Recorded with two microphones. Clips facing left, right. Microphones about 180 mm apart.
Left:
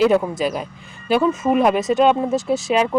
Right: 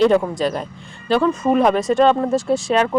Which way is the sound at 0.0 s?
5° left (ahead or behind).